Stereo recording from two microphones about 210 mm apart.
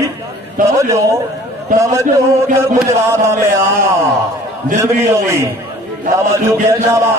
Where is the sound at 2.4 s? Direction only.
15° right (ahead or behind).